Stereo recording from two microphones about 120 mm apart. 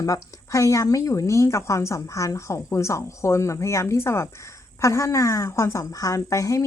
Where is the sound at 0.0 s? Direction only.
25° left (ahead or behind).